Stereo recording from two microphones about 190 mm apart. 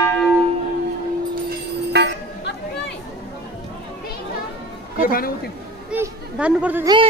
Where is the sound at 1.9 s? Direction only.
60° right (ahead or behind).